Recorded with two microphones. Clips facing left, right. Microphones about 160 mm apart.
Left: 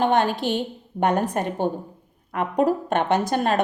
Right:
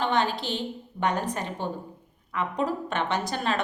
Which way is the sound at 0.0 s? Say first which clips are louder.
Left 6 dB; 55° left (ahead or behind).